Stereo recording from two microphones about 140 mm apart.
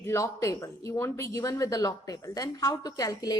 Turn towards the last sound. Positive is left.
turn(degrees=25)  # may be behind; listen again after turning